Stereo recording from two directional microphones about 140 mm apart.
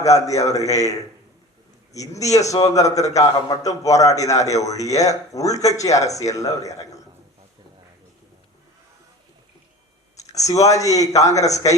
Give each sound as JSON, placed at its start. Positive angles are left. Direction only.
{"t": 0.0, "sound": "a man's voice", "side_deg": 25}
{"t": 10.3, "sound": "a man's voice", "side_deg": 25}